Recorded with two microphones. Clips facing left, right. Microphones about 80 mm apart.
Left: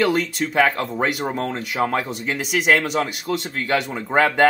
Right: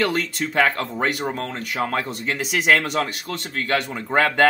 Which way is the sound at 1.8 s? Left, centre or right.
Centre.